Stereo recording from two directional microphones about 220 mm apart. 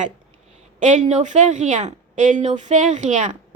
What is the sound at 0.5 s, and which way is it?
Speech, 35° right (ahead or behind).